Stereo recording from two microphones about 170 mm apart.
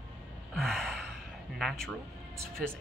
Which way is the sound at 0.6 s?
Centre (ahead or behind).